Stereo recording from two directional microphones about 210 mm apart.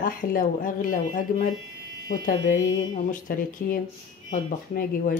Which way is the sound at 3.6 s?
40° left (ahead or behind).